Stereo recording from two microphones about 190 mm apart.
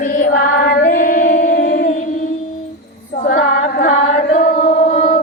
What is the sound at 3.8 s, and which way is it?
Chant, 75° left (ahead or behind).